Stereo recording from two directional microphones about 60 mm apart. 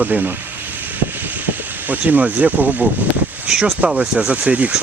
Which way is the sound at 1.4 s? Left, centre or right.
Right.